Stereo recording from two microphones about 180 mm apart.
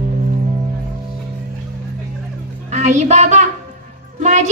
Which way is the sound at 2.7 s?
40° right (ahead or behind).